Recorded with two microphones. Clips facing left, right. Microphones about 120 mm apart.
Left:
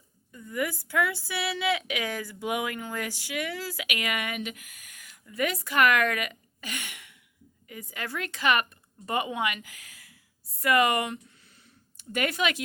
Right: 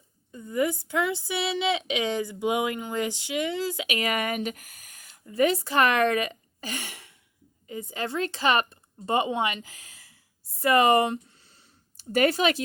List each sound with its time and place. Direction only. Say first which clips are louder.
0.3 s speech: right 5 dB; 25° right (ahead or behind)